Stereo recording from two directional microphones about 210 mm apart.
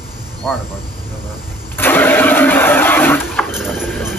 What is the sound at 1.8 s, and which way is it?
Vehicle, 10° left (ahead or behind).